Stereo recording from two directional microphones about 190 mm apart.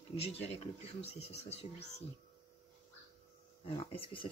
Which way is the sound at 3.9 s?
25° left (ahead or behind).